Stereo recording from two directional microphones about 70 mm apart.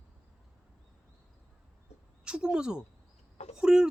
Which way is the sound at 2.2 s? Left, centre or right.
Centre.